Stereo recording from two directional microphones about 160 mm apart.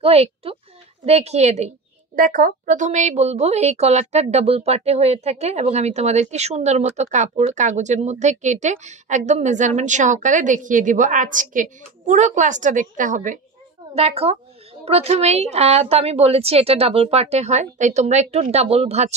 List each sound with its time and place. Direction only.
0.0 s a woman's voice: 40° right (ahead or behind)
2.1 s a woman's voice: 55° right (ahead or behind)
13.9 s a woman's voice: 40° right (ahead or behind)